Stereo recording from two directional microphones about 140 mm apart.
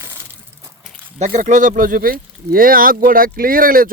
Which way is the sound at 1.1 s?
65° right (ahead or behind).